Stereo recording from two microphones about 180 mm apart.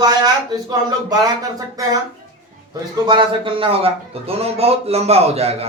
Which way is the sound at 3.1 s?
30° right (ahead or behind).